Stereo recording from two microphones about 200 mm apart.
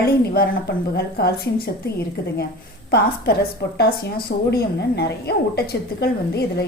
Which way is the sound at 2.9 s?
50° left (ahead or behind).